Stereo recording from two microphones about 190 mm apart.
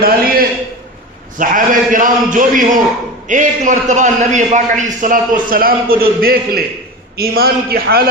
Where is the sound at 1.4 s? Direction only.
45° right (ahead or behind).